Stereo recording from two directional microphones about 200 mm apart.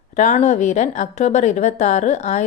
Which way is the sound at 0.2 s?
35° left (ahead or behind).